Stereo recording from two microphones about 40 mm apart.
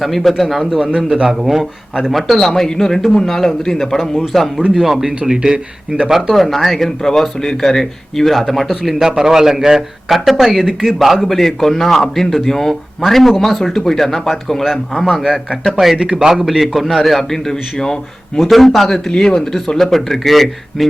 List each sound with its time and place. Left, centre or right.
0.0 s a man's voice: centre
2.5 s speech: centre
3.8 s a man's voice: centre
5.0 s a man's voice: centre
6.3 s speech: centre
8.4 s a man's voice: centre
15.2 s a man's voice: centre
18.3 s a man's voice: centre
19.7 s a man's voice: centre